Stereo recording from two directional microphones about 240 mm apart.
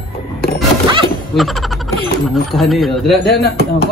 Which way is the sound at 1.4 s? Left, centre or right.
Centre.